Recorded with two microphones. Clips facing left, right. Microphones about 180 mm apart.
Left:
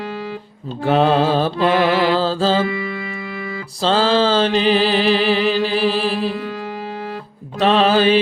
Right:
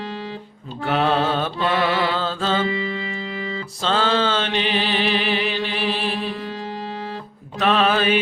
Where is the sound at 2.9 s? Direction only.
30° right (ahead or behind).